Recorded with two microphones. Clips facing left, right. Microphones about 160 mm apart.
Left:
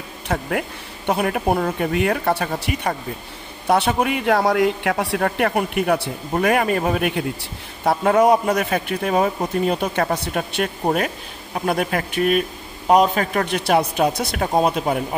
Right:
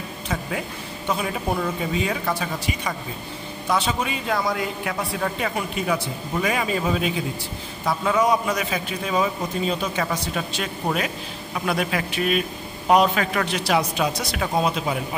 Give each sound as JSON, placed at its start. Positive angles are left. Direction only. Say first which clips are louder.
{"t": 0.3, "sound": "a man's voice", "louder": "left 6 dB", "side_deg": 60}